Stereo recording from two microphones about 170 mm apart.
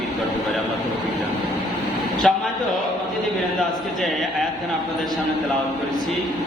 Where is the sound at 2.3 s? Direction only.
Centre (ahead or behind).